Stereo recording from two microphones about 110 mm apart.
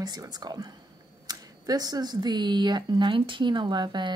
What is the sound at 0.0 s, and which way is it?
A woman's voice, 35° right (ahead or behind).